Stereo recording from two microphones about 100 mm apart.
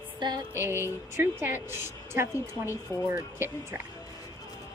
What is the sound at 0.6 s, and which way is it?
A woman's voice, 25° right (ahead or behind).